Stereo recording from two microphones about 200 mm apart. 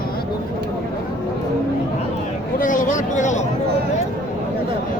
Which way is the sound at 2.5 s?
40° left (ahead or behind).